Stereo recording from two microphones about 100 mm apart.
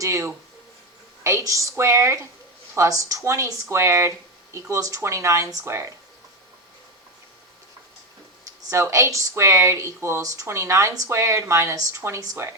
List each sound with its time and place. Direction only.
0.0 s speech: 30° right (ahead or behind)
8.7 s speech: 30° right (ahead or behind)